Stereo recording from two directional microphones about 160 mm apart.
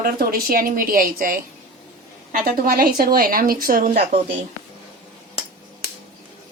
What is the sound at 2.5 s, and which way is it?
Speech, 65° right (ahead or behind).